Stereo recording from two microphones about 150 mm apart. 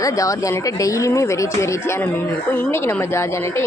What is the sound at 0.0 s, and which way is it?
Speech, 20° left (ahead or behind).